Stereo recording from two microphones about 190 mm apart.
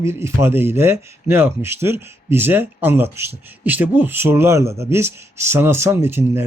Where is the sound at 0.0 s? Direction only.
15° right (ahead or behind).